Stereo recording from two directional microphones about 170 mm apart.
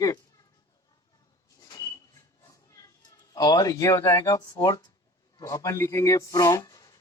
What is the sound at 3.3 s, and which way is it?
A man's voice, 20° left (ahead or behind).